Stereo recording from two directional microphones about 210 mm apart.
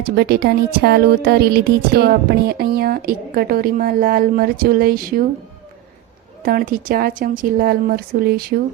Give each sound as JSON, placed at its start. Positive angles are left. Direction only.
{"t": 0.0, "sound": "speech", "side_deg": -50}
{"t": 6.4, "sound": "speech", "side_deg": -45}